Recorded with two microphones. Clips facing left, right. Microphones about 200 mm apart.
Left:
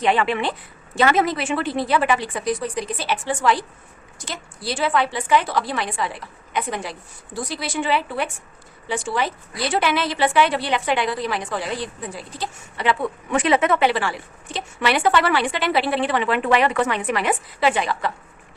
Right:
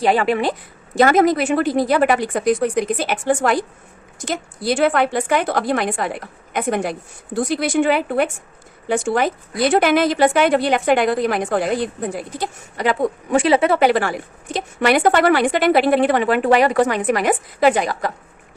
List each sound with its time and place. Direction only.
0.0 s a woman's voice: 40° right (ahead or behind)